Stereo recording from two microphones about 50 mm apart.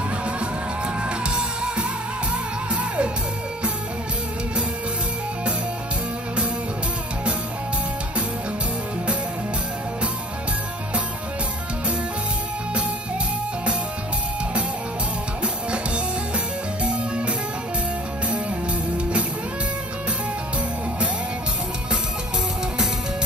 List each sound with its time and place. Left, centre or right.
1.0 s music: centre
16.8 s music: right